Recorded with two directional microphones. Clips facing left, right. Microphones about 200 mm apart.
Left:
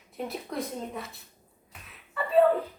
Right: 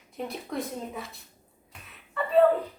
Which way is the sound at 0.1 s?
Centre (ahead or behind).